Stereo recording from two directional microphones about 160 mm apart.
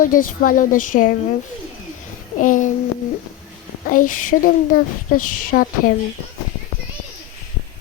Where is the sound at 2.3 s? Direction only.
55° left (ahead or behind).